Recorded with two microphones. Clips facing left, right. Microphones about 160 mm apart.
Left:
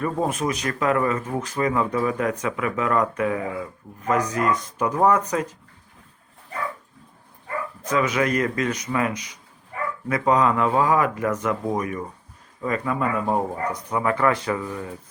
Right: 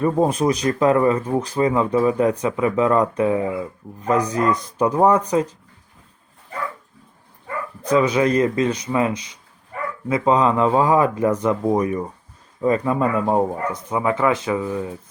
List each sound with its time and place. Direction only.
0.0 s speech: 30° right (ahead or behind)
7.9 s speech: 30° right (ahead or behind); by 14.8 s 15° right (ahead or behind)